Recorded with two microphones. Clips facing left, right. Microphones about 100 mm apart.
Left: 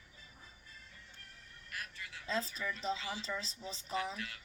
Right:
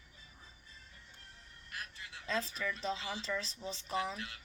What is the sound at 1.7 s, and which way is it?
Quack, 25° right (ahead or behind).